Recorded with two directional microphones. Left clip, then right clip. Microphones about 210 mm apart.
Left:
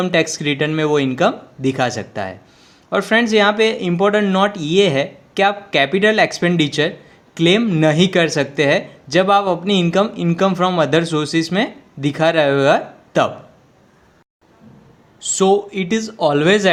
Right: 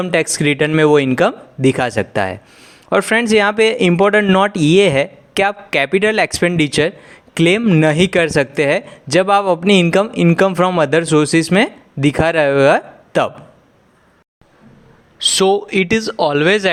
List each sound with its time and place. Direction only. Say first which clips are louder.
0.0 s speech: right 1 dB; 45° right (ahead or behind)
15.2 s speech: right 2 dB; 45° right (ahead or behind)